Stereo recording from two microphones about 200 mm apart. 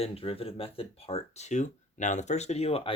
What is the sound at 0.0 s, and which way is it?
Speech, 30° left (ahead or behind).